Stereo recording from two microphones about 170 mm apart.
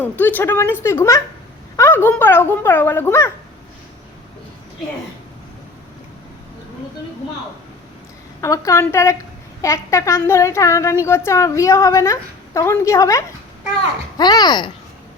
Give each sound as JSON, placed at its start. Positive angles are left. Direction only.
{"t": 0.0, "sound": "a woman's voice", "side_deg": 10}
{"t": 8.4, "sound": "a woman's voice", "side_deg": 20}